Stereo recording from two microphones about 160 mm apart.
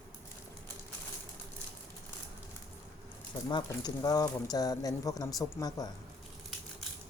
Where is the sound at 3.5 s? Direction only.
25° left (ahead or behind).